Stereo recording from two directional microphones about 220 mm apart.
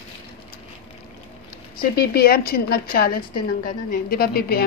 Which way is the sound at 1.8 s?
45° left (ahead or behind).